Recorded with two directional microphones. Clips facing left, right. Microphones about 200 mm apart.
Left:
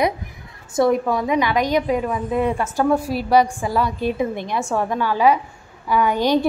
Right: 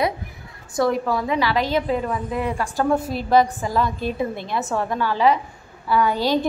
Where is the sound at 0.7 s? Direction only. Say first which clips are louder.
Left 3 dB; 20° left (ahead or behind).